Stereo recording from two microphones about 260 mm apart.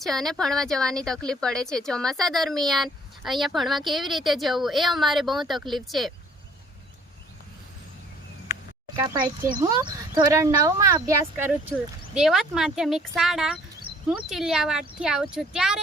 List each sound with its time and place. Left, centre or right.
0.0 s speech: centre
9.0 s speech: centre
12.1 s speech: centre